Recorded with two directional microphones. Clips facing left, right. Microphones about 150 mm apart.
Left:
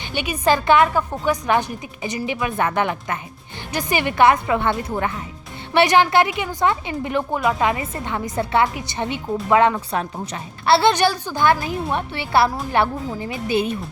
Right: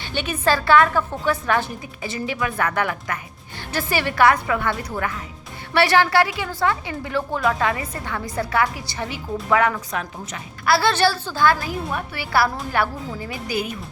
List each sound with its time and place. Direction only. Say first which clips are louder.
0.0 s a woman's voice: left 1 dB; 15° left (ahead or behind)